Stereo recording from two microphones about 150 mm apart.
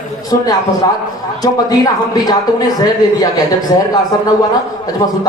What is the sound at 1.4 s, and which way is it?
Speech, 25° left (ahead or behind).